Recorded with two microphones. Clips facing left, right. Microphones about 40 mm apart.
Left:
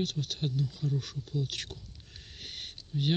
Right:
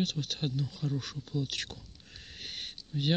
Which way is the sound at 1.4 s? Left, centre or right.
Right.